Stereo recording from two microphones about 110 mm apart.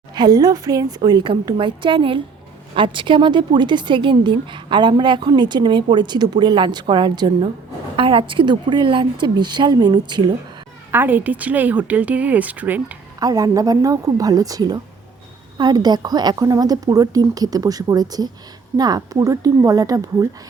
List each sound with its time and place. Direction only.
0.1 s a woman's voice: 40° right (ahead or behind)
10.9 s a woman's voice: 15° right (ahead or behind)
13.1 s a woman's voice: 35° right (ahead or behind)